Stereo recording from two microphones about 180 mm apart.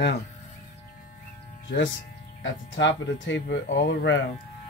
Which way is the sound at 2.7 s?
90° left.